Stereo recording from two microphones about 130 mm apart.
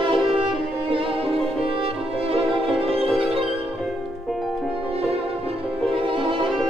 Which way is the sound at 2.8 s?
50° right (ahead or behind).